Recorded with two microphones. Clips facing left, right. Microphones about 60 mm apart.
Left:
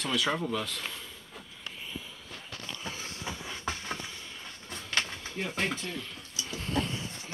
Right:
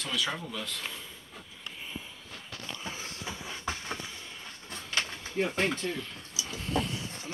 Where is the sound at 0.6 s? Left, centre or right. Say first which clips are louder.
Left 1 dB; centre.